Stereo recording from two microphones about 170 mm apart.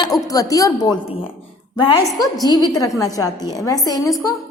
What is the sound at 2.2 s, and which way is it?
A woman's voice, 20° left (ahead or behind).